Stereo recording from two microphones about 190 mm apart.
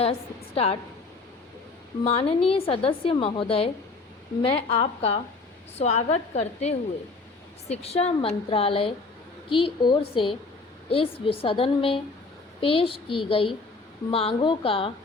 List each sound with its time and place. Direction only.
0.0 s a woman's voice: 30° left (ahead or behind)
2.0 s a woman's voice: 30° left (ahead or behind)